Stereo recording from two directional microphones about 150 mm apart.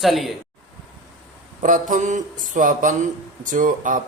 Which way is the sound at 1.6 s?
60° right (ahead or behind).